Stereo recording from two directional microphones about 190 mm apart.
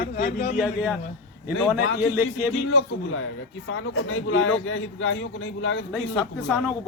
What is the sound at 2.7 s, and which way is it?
A man's voice, 90° left.